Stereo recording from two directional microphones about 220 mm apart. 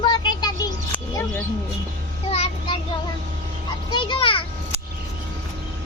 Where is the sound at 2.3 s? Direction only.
30° left (ahead or behind).